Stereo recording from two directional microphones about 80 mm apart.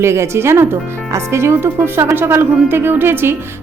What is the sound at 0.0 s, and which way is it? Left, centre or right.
Speech, right.